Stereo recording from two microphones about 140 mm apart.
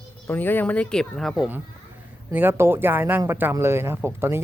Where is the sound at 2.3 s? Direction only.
15° right (ahead or behind).